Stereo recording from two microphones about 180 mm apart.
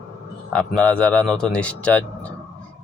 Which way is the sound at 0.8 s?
5° left (ahead or behind).